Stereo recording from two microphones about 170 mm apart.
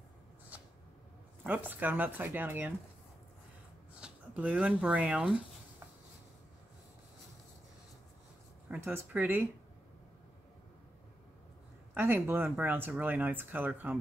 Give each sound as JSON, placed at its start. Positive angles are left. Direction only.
{"t": 1.4, "sound": "speech", "side_deg": -10}
{"t": 4.0, "sound": "speech", "side_deg": -10}
{"t": 8.6, "sound": "speech", "side_deg": -10}
{"t": 11.9, "sound": "speech", "side_deg": -10}